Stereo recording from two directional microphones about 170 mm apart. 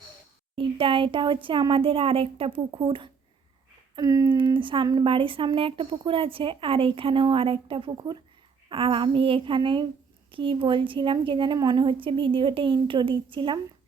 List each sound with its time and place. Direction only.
0.5 s a woman's voice: 30° right (ahead or behind)